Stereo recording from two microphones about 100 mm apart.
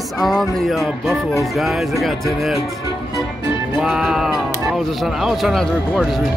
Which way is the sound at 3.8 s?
5° right (ahead or behind).